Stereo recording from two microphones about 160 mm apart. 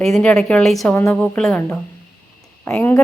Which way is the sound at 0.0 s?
5° left (ahead or behind).